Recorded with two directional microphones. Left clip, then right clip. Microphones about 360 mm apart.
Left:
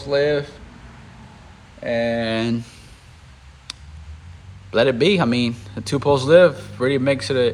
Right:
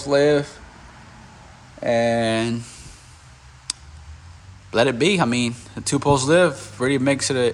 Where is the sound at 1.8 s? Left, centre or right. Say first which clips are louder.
Right 2 dB; centre.